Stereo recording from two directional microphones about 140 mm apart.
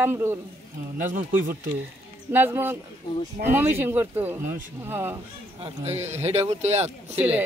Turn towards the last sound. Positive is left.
turn(degrees=-50)  # may be behind; listen again after turning